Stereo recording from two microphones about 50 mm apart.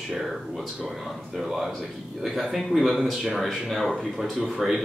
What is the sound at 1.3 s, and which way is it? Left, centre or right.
Speech, centre.